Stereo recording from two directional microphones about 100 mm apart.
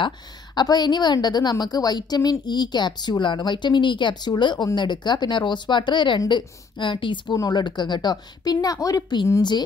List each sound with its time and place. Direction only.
0.6 s a woman's voice: 45° left (ahead or behind)